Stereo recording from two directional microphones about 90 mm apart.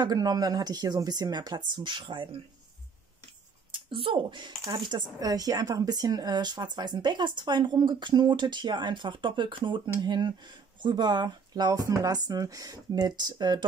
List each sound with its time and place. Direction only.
0.0 s speech: 45° right (ahead or behind)
3.7 s speech: 75° right (ahead or behind)
9.9 s speech: 55° right (ahead or behind)